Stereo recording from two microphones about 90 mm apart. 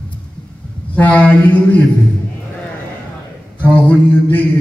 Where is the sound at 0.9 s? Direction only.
15° left (ahead or behind).